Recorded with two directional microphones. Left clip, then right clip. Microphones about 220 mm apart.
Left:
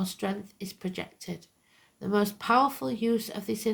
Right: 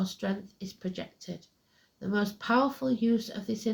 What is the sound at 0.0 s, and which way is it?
Speech, 45° left (ahead or behind).